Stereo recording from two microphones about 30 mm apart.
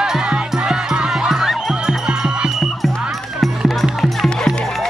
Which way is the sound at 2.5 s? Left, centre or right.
Centre.